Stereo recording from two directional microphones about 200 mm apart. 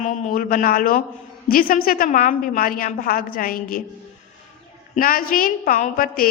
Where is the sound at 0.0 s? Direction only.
40° left (ahead or behind).